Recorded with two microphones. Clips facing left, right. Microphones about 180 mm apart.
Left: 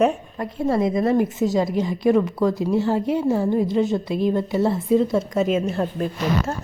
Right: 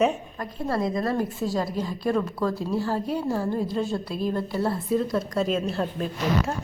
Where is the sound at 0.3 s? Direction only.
25° left (ahead or behind).